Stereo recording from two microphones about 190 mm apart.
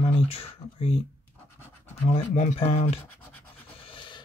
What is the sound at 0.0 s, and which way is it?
Speech, 30° left (ahead or behind).